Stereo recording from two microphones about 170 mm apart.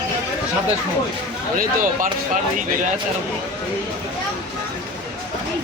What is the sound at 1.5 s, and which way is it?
Speech, 55° right (ahead or behind).